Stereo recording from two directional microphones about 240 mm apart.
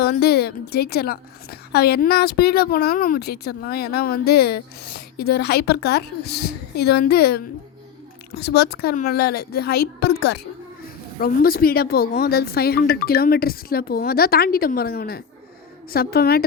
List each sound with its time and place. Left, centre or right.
0.0 s a woman's voice: left
11.2 s a woman's voice: left